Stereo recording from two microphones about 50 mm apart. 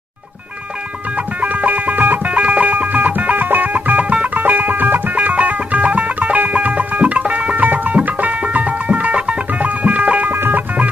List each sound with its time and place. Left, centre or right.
1.1 s music: right
10.3 s music: right